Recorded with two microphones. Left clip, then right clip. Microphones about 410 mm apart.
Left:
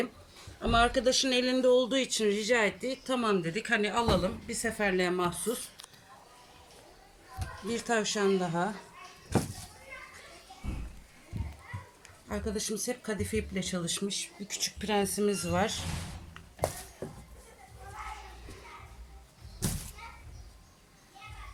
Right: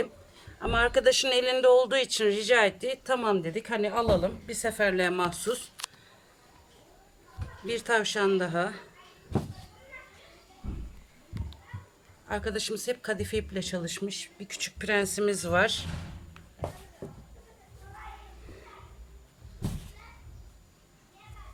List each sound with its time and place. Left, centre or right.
0.6 s speech: centre
7.7 s speech: right
12.3 s speech: right